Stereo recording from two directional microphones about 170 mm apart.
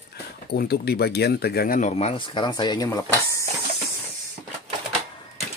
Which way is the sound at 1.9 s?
35° left (ahead or behind).